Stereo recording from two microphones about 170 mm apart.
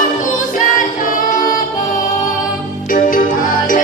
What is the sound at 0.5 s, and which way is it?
A capella, 50° left (ahead or behind).